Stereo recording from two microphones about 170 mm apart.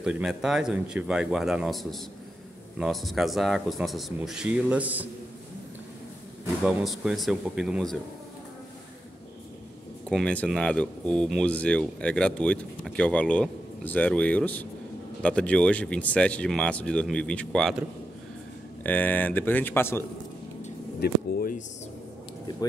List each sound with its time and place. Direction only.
0.0 s speech: 5° right (ahead or behind)
6.6 s speech: centre (ahead or behind)
10.0 s speech: 5° left (ahead or behind)
21.0 s a sound: 55° left (ahead or behind)